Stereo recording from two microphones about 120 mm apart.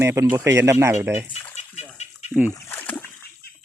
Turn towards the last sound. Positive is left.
turn(degrees=15)  # may be behind; listen again after turning